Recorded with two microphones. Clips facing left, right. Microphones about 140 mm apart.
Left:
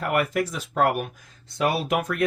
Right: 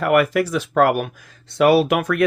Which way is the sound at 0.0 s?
85° right.